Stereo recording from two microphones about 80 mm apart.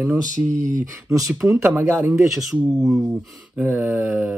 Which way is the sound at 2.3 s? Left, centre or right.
Centre.